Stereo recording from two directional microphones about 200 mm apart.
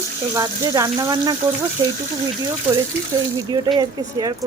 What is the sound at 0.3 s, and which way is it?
Speech, 15° right (ahead or behind).